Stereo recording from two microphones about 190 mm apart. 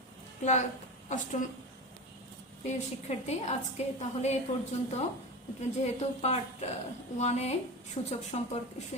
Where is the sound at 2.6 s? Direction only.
35° left (ahead or behind).